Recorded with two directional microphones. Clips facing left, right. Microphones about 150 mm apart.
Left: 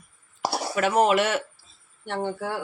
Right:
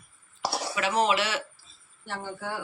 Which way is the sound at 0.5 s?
50° left (ahead or behind).